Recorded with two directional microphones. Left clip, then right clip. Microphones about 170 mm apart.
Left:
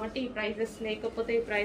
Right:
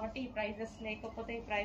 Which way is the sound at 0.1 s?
25° left (ahead or behind).